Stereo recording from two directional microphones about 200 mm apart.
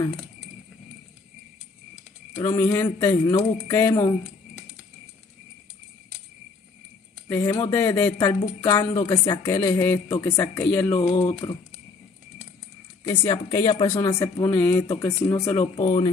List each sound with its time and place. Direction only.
2.3 s speech: 15° left (ahead or behind)
7.2 s speech: 15° left (ahead or behind)
10.9 s speech: 25° left (ahead or behind)
13.0 s speech: 15° left (ahead or behind)
15.6 s speech: 30° left (ahead or behind)